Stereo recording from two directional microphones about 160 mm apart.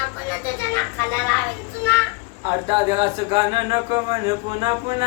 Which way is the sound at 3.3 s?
25° right (ahead or behind).